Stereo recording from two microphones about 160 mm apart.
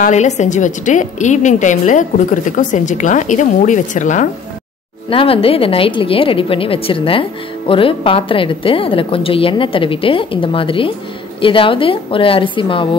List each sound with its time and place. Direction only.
0.0 s a woman's voice: 45° left (ahead or behind)
5.1 s a woman's voice: 35° left (ahead or behind)